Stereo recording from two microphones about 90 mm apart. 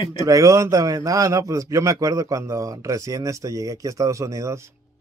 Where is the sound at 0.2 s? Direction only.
35° right (ahead or behind).